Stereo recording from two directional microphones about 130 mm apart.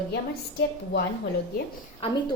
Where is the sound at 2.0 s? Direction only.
45° left (ahead or behind).